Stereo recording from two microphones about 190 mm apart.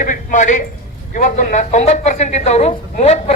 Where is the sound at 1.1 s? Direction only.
40° left (ahead or behind).